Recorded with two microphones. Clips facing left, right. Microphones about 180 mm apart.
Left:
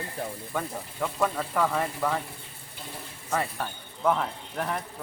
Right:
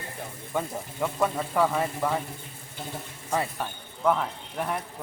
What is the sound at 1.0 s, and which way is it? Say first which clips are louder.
Speech: right 1 dB; 15° right (ahead or behind).